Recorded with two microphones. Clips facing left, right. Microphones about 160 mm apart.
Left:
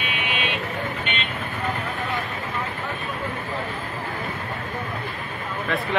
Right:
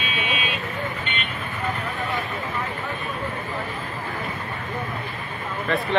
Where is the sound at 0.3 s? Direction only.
65° left (ahead or behind).